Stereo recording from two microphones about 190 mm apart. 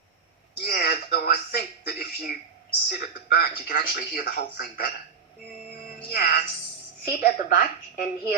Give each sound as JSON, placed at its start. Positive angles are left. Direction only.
{"t": 0.6, "sound": "a sound", "side_deg": 50}
{"t": 2.9, "sound": "speech", "side_deg": 50}
{"t": 6.1, "sound": "speech", "side_deg": 50}